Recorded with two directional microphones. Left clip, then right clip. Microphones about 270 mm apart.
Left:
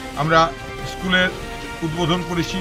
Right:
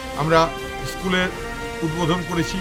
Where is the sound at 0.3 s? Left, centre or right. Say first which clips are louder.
Left 1 dB; centre.